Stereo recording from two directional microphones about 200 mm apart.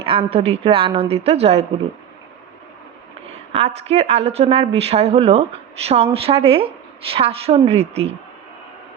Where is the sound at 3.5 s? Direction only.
30° right (ahead or behind).